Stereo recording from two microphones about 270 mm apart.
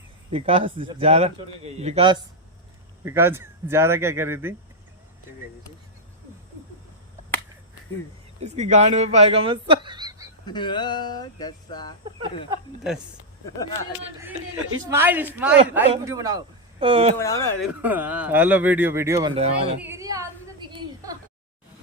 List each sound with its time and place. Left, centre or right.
0.3 s speech: right
3.0 s speech: centre
8.4 s speech: right
10.4 s speech: centre
14.8 s speech: centre
17.2 s speech: centre
17.6 s speech: centre; by 19.7 s right
19.8 s a woman's voice: centre
20.7 s a sound: centre